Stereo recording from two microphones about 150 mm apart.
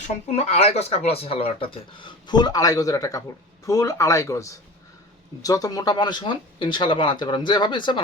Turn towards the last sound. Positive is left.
turn(degrees=30)  # may be behind; listen again after turning